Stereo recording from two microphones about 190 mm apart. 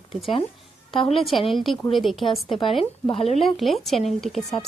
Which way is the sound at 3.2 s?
35° left (ahead or behind).